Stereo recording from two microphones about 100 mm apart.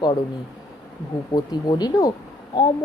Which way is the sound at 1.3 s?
45° left (ahead or behind).